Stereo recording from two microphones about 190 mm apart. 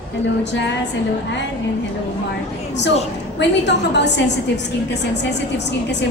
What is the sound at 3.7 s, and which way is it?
Speech, 65° left (ahead or behind).